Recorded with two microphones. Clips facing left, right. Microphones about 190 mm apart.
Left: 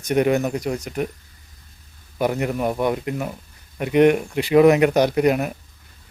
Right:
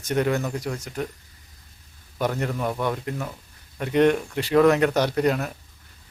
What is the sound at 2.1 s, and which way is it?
Speech, 10° left (ahead or behind).